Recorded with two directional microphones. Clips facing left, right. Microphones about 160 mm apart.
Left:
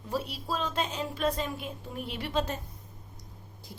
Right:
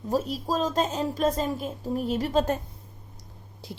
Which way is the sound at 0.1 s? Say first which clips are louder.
Right 6 dB; 40° right (ahead or behind).